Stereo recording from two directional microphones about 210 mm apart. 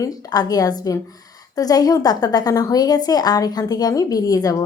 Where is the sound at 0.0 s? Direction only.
20° left (ahead or behind).